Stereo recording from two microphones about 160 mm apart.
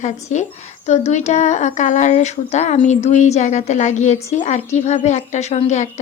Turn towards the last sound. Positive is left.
turn(degrees=45)  # may be behind; listen again after turning